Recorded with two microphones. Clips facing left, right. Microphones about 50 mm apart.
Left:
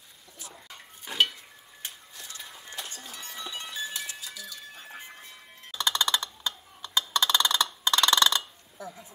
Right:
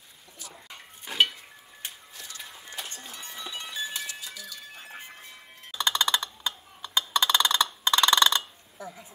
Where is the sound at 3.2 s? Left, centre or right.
Centre.